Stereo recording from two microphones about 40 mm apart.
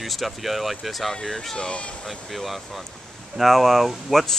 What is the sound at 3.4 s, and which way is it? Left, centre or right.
Speech, centre.